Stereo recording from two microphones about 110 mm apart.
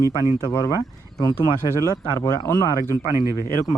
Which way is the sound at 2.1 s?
35° left (ahead or behind).